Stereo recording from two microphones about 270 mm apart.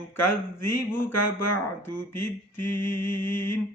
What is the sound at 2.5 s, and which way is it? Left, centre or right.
Mantra, centre.